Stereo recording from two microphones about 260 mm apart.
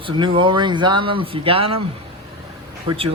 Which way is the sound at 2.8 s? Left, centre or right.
Right.